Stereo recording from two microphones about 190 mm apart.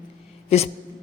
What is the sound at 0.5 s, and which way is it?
Speech, 35° left (ahead or behind).